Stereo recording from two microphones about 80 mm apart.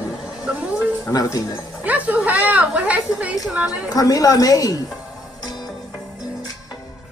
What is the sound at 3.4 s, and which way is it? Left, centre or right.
Speech, centre.